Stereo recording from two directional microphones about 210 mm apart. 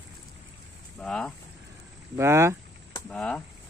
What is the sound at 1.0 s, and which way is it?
Speech, 5° left (ahead or behind).